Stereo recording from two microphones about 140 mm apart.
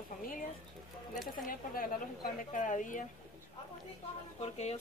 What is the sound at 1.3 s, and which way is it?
Speech, 85° left.